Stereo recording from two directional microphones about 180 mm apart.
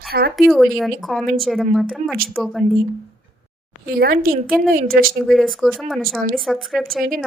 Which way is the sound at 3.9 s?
55° right (ahead or behind).